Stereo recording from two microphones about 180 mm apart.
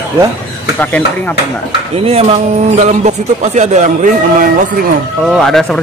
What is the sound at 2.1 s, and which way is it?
A man's voice, 35° right (ahead or behind).